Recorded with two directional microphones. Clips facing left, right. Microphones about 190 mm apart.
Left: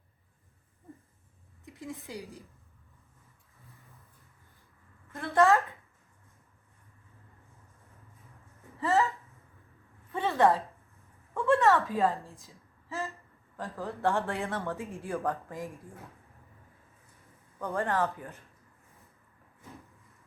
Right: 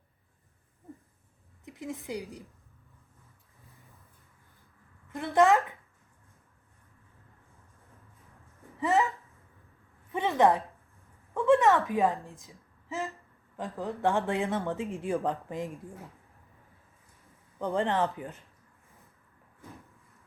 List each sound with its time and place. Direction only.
1.6 s a woman's voice: 20° right (ahead or behind)
5.1 s speech: 15° right (ahead or behind)
8.8 s a sound: 15° right (ahead or behind)
11.3 s a woman's voice: 15° right (ahead or behind)
17.6 s speech: 20° right (ahead or behind)